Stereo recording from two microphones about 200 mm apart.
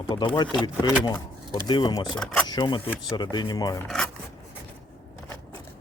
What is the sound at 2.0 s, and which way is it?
Speech, 5° left (ahead or behind).